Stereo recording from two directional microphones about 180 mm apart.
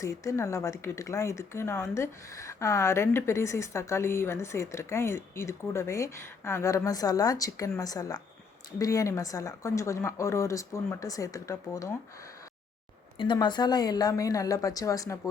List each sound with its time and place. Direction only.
0.0 s speech: 15° left (ahead or behind)
13.1 s a woman's voice: 25° left (ahead or behind)